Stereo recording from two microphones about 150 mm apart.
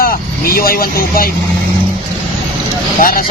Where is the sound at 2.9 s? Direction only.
75° left (ahead or behind).